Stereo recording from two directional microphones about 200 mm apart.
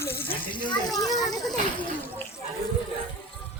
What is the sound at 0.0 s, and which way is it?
Water, 10° left (ahead or behind).